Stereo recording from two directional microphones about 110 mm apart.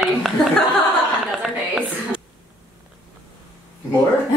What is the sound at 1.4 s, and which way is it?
Speech, 10° right (ahead or behind).